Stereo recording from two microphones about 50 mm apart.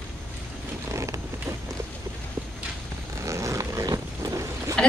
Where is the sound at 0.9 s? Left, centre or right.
Right.